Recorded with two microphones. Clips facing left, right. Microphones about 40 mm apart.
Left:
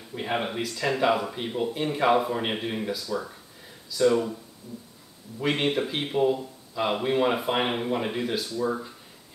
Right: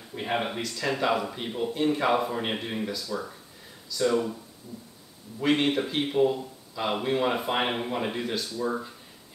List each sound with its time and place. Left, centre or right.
0.1 s speech: centre
5.4 s speech: centre